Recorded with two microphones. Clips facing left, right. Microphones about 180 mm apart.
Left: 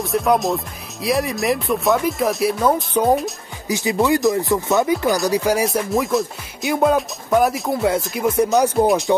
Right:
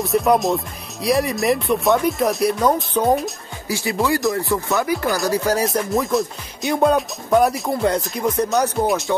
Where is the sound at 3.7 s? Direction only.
20° left (ahead or behind).